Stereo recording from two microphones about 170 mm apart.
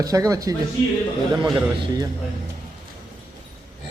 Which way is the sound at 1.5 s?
25° right (ahead or behind).